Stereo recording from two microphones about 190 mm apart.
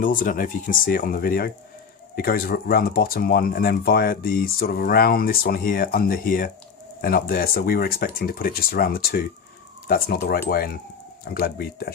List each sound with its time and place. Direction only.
0.0 s speech: 45° left (ahead or behind)